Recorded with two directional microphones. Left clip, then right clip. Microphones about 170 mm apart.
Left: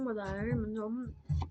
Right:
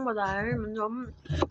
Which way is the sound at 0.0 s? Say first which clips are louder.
Right 8 dB; 25° left (ahead or behind).